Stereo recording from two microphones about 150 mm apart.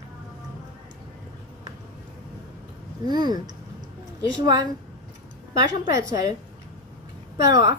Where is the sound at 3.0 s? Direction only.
30° right (ahead or behind).